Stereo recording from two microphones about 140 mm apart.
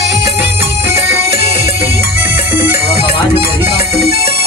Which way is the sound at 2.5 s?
15° right (ahead or behind).